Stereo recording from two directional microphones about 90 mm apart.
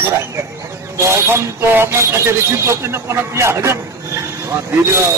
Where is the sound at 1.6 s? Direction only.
25° right (ahead or behind).